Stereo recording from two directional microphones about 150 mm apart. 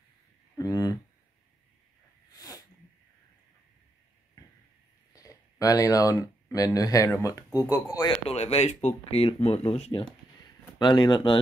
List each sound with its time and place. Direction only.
0.6 s a sound: 25° left (ahead or behind)
2.3 s sneeze: 20° left (ahead or behind)
5.1 s speech: 25° left (ahead or behind)
8.3 s speech: 45° left (ahead or behind)